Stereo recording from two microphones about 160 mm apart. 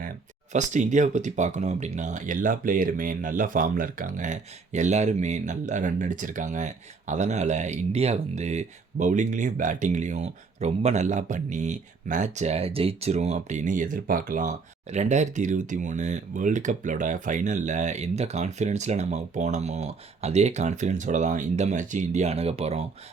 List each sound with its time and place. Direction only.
0.5 s speech: 50° right (ahead or behind)